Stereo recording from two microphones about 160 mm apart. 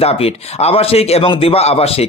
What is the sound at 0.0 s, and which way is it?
A man's voice, 40° left (ahead or behind).